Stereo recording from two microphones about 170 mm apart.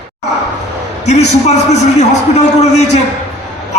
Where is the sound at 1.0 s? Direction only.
40° left (ahead or behind).